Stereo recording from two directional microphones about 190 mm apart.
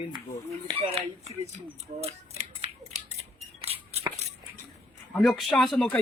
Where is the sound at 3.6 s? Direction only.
30° right (ahead or behind).